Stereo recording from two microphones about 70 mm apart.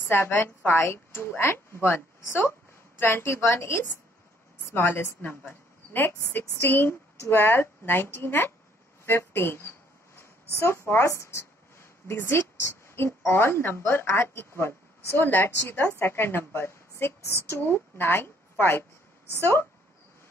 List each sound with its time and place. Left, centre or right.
0.0 s a woman's voice: left
9.0 s a sound: left
10.6 s a woman's voice: left